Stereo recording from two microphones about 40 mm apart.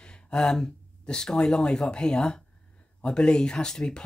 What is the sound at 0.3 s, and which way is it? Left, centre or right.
Speech, centre.